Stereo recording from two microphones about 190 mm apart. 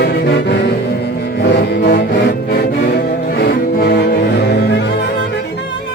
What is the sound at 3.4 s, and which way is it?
Music, 60° left (ahead or behind).